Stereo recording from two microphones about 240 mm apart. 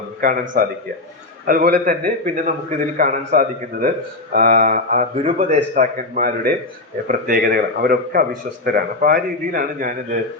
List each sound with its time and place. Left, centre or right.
0.2 s a man's voice: right
1.5 s speech: right